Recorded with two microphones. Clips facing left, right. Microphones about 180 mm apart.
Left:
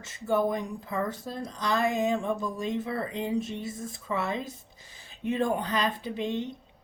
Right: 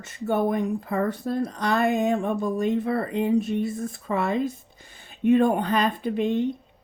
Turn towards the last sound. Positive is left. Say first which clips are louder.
# right 7 dB
turn(degrees=-55)  # may be behind; listen again after turning